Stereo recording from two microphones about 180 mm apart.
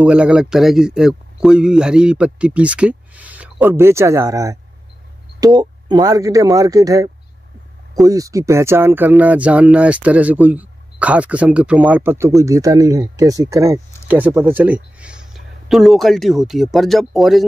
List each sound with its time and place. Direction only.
0.0 s speech: 5° right (ahead or behind)